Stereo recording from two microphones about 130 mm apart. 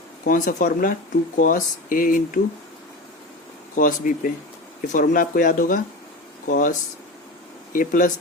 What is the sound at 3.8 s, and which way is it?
Speech, 90° left.